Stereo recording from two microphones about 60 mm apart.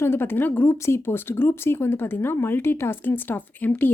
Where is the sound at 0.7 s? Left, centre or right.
Left.